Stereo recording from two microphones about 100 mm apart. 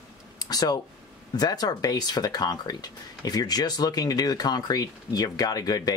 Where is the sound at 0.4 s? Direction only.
40° left (ahead or behind).